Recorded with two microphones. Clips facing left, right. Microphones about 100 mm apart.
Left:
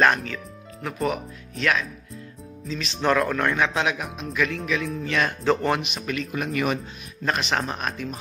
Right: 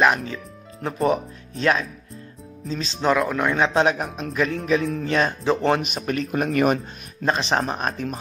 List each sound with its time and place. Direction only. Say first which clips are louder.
0.0 s speech: right 1 dB; 15° right (ahead or behind)
0.8 s speech: right 5 dB; 30° right (ahead or behind)
3.0 s speech: right 1 dB; 10° right (ahead or behind)
3.5 s speech: right 4 dB; 30° right (ahead or behind)
7.2 s speech: right 3 dB; 30° right (ahead or behind)